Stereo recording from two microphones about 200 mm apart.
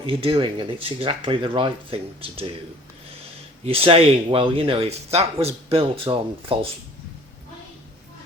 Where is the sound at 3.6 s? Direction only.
30° right (ahead or behind).